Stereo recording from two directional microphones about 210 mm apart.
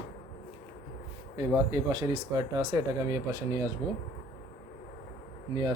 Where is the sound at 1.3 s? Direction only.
20° right (ahead or behind).